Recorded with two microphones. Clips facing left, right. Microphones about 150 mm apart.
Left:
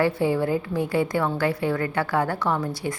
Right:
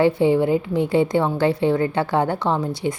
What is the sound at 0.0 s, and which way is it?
Speech, 20° right (ahead or behind).